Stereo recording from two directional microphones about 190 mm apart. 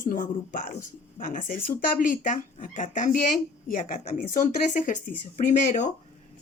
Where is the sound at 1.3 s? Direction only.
45° left (ahead or behind).